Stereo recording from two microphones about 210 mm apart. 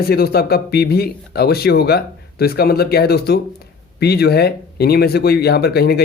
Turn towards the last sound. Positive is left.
turn(degrees=50)  # may be behind; listen again after turning